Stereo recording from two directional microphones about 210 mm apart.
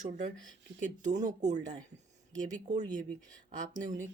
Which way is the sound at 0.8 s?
35° right (ahead or behind).